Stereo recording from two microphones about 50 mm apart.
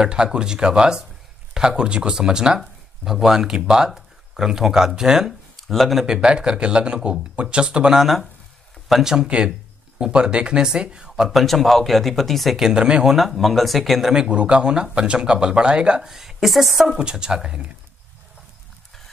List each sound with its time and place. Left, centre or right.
0.0 s speech: centre
5.6 s speech: centre
6.0 s speech: centre
8.0 s speech: centre
11.2 s speech: centre
12.5 s speech: centre
13.1 s speech: centre
14.1 s speech: centre
16.1 s speech: centre
17.0 s speech: centre